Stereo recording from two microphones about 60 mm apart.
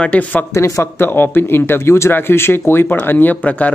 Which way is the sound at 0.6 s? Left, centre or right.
Left.